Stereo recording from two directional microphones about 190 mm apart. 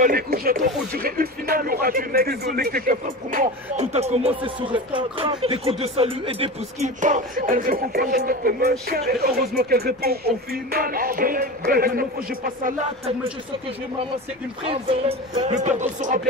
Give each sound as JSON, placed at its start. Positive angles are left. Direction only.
{"t": 0.0, "sound": "speech", "side_deg": -50}
{"t": 7.0, "sound": "speech", "side_deg": -40}
{"t": 14.7, "sound": "speech", "side_deg": -35}